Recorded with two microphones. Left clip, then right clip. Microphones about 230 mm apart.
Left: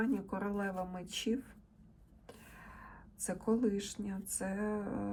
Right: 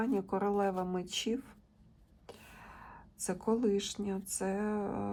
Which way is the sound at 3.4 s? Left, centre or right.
Centre.